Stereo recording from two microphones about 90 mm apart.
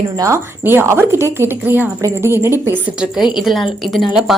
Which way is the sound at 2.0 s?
30° right (ahead or behind).